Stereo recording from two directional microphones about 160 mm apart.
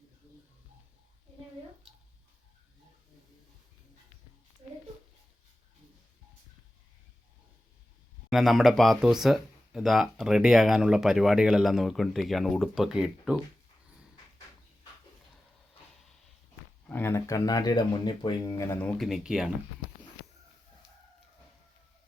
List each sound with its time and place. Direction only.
8.3 s speech: centre (ahead or behind)
16.8 s speech: 15° left (ahead or behind)
18.9 s speech: centre (ahead or behind)